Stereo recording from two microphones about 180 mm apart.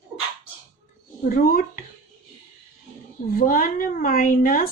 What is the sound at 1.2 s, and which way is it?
Speech, 55° left (ahead or behind).